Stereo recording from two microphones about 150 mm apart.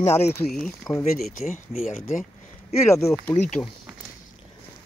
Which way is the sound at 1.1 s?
70° left (ahead or behind).